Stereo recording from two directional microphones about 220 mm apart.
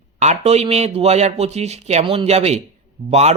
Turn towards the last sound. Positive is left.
turn(degrees=-30)  # may be behind; listen again after turning